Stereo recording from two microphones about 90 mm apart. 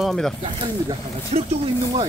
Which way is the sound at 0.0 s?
5° left (ahead or behind).